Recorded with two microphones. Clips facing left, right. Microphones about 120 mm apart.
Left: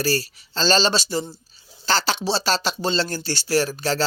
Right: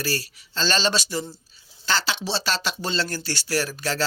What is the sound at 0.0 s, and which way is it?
Speech, 35° left (ahead or behind).